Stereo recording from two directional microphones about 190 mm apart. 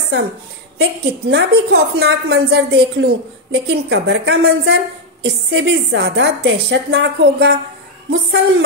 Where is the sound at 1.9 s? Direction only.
55° right (ahead or behind).